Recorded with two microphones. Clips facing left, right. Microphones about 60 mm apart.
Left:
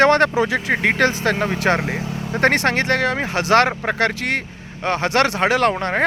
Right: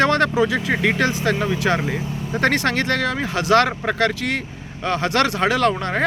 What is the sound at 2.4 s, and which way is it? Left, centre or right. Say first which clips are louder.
Speech: left 2 dB; left.